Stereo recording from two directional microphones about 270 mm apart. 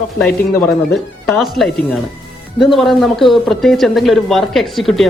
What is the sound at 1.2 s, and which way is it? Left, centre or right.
Speech, centre.